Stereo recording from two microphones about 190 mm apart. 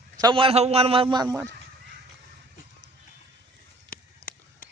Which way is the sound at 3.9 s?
45° left (ahead or behind).